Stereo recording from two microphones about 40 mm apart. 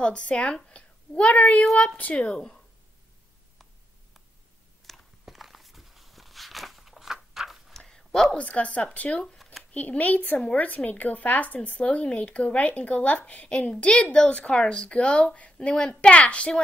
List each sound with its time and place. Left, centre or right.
0.0 s a woman's voice: left
2.1 s a woman's voice: left
4.9 s biting: centre
5.2 s walk: centre
7.8 s a sound: centre
8.4 s speech: left
9.4 s a sound: centre
9.8 s a woman's voice: left